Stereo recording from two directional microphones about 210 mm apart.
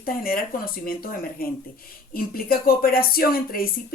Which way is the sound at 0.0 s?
45° left (ahead or behind).